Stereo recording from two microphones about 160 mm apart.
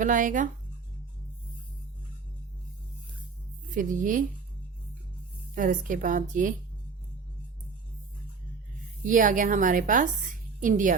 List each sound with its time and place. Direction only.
0.0 s a woman's voice: 55° right (ahead or behind)
3.8 s a woman's voice: 55° right (ahead or behind)
5.5 s a woman's voice: 55° right (ahead or behind)
9.0 s a woman's voice: 55° right (ahead or behind)